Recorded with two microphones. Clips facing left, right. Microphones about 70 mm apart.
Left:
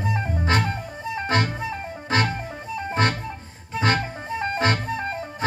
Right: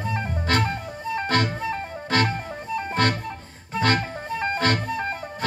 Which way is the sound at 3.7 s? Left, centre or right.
Left.